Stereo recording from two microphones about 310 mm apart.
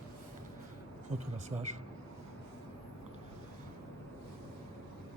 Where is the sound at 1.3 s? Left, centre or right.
Right.